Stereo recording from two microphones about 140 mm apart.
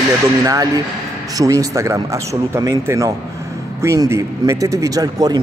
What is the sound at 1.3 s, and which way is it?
A man's voice, 25° right (ahead or behind).